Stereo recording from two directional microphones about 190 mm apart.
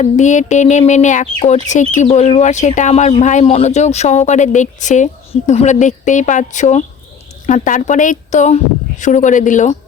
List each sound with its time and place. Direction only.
0.0 s a woman's voice: 40° left (ahead or behind)